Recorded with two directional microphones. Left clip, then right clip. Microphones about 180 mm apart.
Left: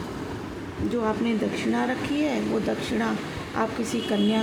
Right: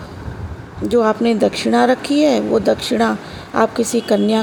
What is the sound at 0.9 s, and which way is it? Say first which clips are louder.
Speech: right 12 dB; 50° right (ahead or behind).